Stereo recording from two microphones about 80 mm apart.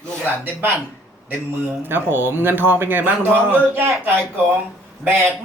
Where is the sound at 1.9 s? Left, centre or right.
Right.